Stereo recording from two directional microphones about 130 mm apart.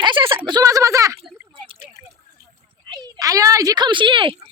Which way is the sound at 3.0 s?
30° right (ahead or behind).